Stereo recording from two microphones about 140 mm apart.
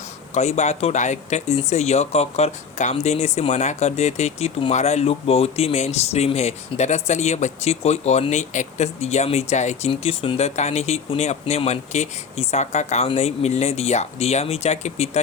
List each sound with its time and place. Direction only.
0.3 s speech: 50° left (ahead or behind)